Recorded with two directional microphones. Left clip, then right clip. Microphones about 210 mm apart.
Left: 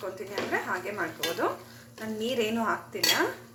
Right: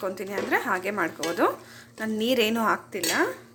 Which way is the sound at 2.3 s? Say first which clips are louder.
Right 5 dB; 45° right (ahead or behind).